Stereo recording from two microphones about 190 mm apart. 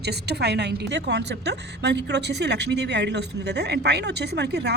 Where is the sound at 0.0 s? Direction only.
60° right (ahead or behind).